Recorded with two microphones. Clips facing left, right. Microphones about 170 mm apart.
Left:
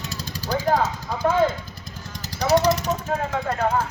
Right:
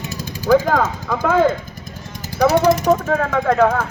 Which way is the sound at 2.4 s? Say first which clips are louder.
Right 5 dB; 50° right (ahead or behind).